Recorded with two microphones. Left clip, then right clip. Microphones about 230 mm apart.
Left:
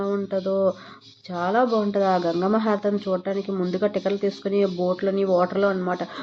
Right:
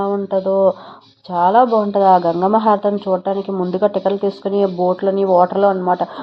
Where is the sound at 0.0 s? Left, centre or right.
Centre.